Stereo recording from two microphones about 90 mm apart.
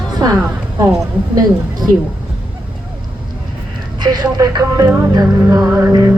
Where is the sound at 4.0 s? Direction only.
50° right (ahead or behind).